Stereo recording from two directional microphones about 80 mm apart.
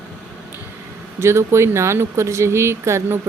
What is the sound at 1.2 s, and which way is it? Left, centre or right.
Speech, right.